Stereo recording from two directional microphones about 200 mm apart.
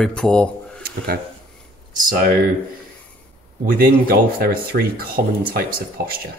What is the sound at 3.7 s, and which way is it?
Speech, 50° right (ahead or behind).